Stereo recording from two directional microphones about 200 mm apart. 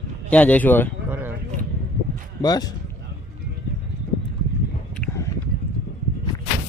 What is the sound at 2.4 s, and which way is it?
Speech, 20° left (ahead or behind).